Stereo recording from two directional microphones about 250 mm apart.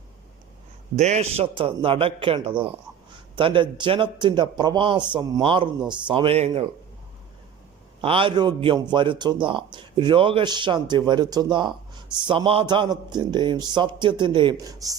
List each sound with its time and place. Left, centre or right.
0.9 s speech: right
8.0 s a man's voice: right